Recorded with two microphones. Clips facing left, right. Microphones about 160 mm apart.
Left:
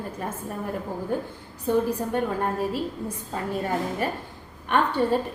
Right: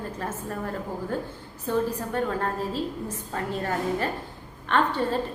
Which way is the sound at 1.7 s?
15° left (ahead or behind).